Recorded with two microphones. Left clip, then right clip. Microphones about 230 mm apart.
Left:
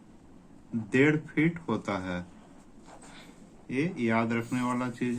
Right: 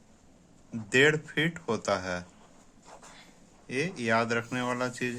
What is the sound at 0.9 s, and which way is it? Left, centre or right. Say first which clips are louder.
Speech: right 2 dB; right.